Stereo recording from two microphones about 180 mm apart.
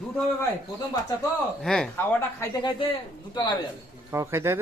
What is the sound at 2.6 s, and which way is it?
Speech, 25° left (ahead or behind).